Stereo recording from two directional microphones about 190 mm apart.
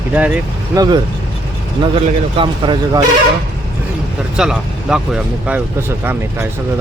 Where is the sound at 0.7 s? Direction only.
20° right (ahead or behind).